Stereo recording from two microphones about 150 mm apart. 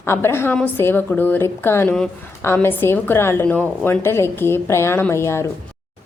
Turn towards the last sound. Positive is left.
turn(degrees=20)  # may be behind; listen again after turning